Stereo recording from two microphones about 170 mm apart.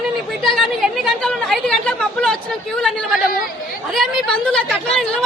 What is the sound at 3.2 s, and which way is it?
Chatter, 55° left (ahead or behind).